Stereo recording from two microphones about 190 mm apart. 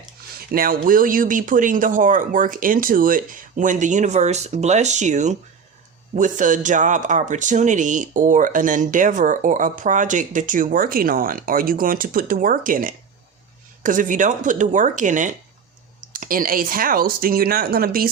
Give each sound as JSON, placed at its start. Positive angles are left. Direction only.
{"t": 0.5, "sound": "speech", "side_deg": -50}